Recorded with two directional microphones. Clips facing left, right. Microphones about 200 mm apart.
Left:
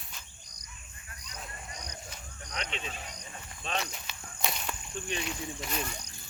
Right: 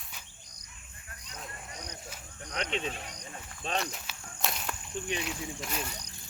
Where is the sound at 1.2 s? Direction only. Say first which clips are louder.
Even; 55° right (ahead or behind).